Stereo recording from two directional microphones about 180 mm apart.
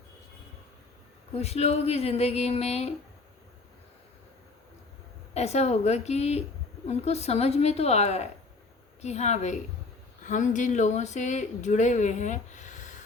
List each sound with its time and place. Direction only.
1.3 s speech: 35° left (ahead or behind)
5.3 s speech: 35° left (ahead or behind)